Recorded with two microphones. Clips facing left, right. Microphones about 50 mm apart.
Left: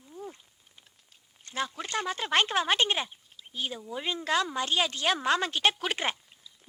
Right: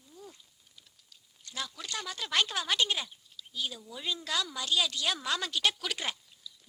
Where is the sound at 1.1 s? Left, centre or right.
Left.